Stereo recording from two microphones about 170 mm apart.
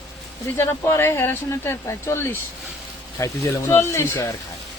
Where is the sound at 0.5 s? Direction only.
15° left (ahead or behind).